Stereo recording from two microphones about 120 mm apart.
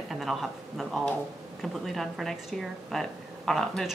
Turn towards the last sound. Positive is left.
turn(degrees=0)  # may be behind; listen again after turning